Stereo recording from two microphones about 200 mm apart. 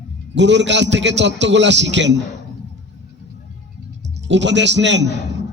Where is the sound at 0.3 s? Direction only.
65° right (ahead or behind).